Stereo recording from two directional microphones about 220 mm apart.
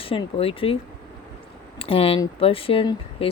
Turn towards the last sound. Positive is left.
turn(degrees=25)  # may be behind; listen again after turning